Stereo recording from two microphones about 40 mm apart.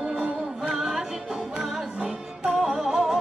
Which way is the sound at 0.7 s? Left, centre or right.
Centre.